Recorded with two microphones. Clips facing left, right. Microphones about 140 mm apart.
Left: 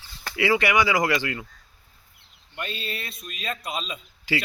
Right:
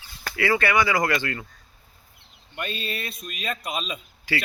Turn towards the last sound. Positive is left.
turn(degrees=15)  # may be behind; listen again after turning